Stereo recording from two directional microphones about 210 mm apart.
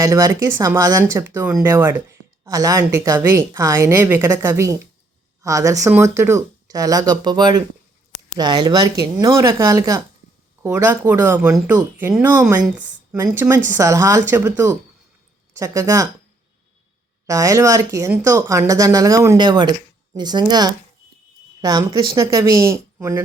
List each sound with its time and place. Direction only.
0.0 s a woman's voice: 15° right (ahead or behind)
17.2 s a woman's voice: 15° right (ahead or behind)